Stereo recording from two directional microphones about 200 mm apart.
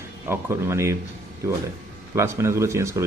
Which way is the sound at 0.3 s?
15° right (ahead or behind).